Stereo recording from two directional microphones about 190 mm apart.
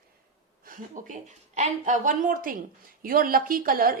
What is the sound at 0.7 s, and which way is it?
A woman's voice, 40° right (ahead or behind).